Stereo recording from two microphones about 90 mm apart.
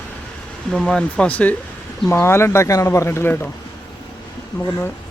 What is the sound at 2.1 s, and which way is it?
Speech, 30° left (ahead or behind).